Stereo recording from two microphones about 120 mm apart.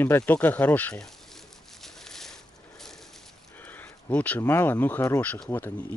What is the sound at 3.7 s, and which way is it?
Speech, 15° left (ahead or behind).